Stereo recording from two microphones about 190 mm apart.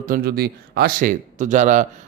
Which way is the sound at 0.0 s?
50° right (ahead or behind).